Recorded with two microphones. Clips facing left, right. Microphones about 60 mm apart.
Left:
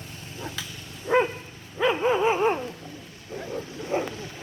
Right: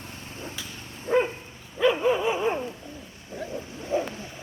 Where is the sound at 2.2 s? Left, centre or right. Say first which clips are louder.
Left 3 dB; left.